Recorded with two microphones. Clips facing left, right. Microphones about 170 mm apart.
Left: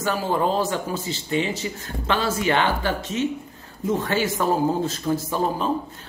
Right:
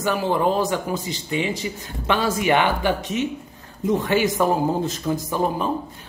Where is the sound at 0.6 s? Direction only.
15° right (ahead or behind).